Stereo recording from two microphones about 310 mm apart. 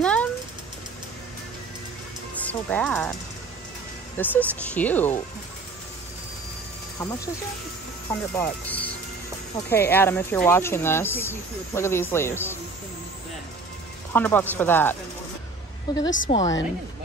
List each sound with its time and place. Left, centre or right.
0.0 s cat: centre
2.3 s speech: centre
4.2 s speech: centre
8.1 s speech: centre
14.1 s speech: centre